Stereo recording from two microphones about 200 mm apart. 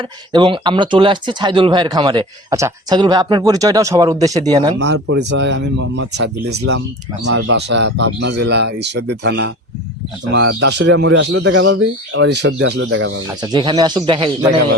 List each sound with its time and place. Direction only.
0.3 s speech: 25° right (ahead or behind)
4.8 s speech: 75° right (ahead or behind)
12.9 s speech: 75° right (ahead or behind)
13.2 s speech: 20° right (ahead or behind)